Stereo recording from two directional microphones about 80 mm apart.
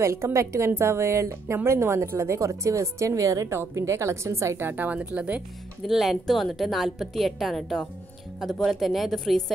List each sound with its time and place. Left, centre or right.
0.0 s a woman's voice: right; by 5.4 s centre
5.9 s a woman's voice: centre